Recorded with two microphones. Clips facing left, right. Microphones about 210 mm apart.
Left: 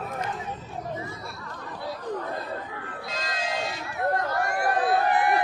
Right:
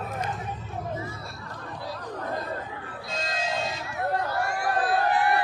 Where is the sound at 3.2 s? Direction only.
25° right (ahead or behind).